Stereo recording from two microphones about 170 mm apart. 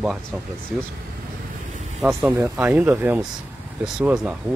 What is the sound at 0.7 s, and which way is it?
Speech, 5° right (ahead or behind).